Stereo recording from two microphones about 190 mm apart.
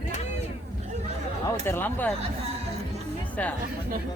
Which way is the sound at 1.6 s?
10° left (ahead or behind).